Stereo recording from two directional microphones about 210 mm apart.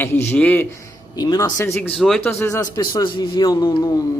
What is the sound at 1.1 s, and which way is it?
Speech, 20° left (ahead or behind).